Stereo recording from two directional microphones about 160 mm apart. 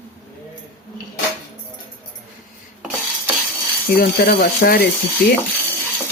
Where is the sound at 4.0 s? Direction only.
65° left (ahead or behind).